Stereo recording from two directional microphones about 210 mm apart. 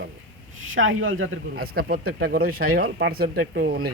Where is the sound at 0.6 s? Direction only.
70° right (ahead or behind).